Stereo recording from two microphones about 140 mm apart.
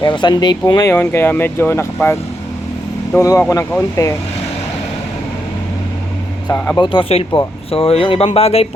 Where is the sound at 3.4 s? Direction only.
20° left (ahead or behind).